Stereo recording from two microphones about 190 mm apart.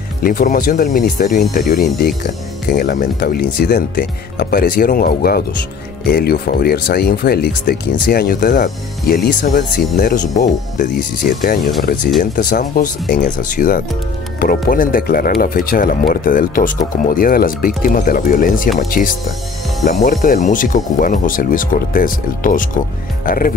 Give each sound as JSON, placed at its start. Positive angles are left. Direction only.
{"t": 0.2, "sound": "speech", "side_deg": 45}